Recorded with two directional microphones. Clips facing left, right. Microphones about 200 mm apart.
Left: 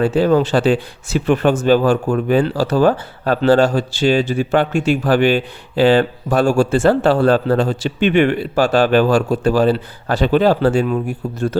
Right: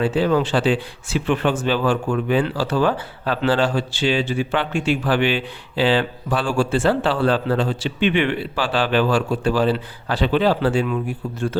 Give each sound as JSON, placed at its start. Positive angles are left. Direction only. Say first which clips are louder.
{"t": 0.0, "sound": "speech", "louder": "left 4 dB", "side_deg": 45}